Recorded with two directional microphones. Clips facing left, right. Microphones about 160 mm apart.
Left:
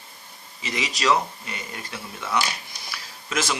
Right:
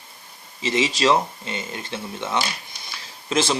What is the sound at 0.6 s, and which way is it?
Speech, 25° right (ahead or behind).